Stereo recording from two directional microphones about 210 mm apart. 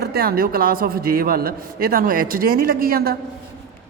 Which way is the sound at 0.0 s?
45° right (ahead or behind).